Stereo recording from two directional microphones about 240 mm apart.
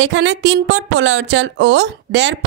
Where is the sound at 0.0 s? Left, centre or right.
Right.